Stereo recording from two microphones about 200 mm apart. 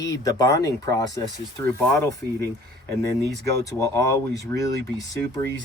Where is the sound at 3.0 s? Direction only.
15° left (ahead or behind).